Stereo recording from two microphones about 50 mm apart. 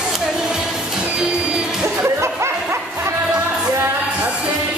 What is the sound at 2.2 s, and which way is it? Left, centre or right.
Music, right.